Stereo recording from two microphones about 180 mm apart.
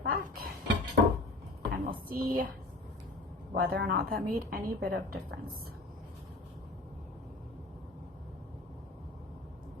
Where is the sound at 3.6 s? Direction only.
60° right (ahead or behind).